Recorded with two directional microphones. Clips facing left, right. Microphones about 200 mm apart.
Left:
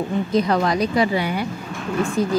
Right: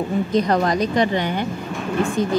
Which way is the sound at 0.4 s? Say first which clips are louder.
Even; 40° right (ahead or behind).